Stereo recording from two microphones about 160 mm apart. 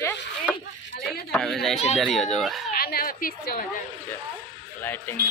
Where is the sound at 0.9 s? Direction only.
75° left (ahead or behind).